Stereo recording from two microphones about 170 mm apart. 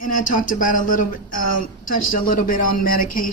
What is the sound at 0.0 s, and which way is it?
A woman's voice, 50° left (ahead or behind).